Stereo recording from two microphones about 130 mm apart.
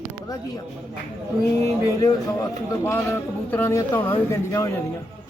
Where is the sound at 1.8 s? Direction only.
30° left (ahead or behind).